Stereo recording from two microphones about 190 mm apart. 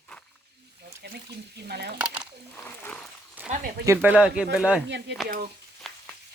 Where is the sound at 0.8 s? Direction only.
60° right (ahead or behind).